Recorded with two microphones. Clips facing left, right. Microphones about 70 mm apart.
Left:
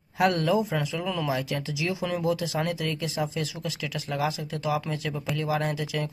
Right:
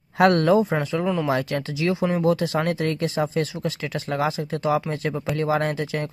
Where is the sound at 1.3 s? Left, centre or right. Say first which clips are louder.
Right 5 dB; right.